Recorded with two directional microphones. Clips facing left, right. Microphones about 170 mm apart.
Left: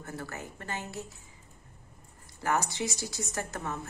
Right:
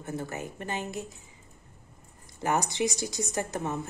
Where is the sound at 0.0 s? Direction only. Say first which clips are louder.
Right 5 dB; 20° right (ahead or behind).